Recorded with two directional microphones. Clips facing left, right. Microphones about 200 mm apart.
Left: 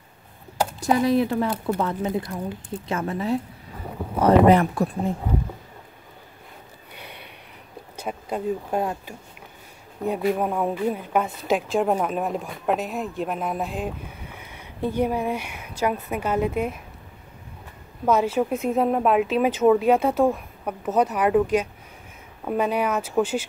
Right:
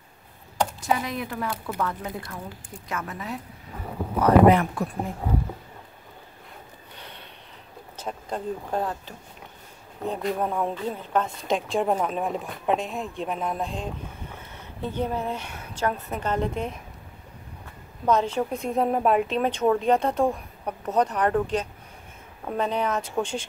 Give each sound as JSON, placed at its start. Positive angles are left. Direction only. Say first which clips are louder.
{"t": 0.7, "sound": "speech", "louder": "left 13 dB", "side_deg": 35}
{"t": 7.0, "sound": "a sound", "louder": "left 3 dB", "side_deg": 10}
{"t": 7.9, "sound": "a woman's voice", "louder": "left 3 dB", "side_deg": 10}
{"t": 18.0, "sound": "a woman's voice", "louder": "left 2 dB", "side_deg": 5}